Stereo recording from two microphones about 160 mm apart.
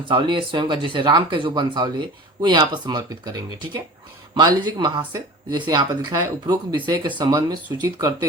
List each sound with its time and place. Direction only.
0.0 s speech: 30° right (ahead or behind)